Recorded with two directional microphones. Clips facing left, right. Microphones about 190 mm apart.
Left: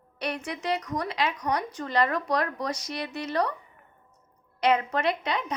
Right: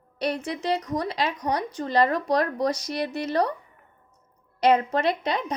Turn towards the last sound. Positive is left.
turn(degrees=-35)  # may be behind; listen again after turning